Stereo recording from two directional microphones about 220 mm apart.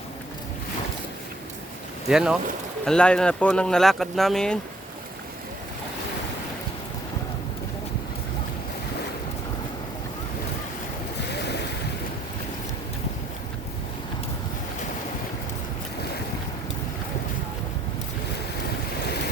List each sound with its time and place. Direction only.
2.0 s speech: 5° right (ahead or behind)
11.3 s waves: 50° left (ahead or behind)